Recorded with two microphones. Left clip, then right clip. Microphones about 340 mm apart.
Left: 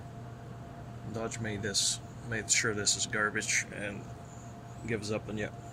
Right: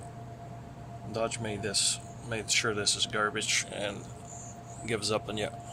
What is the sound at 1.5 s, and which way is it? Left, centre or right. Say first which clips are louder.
Speech: right 1 dB; right.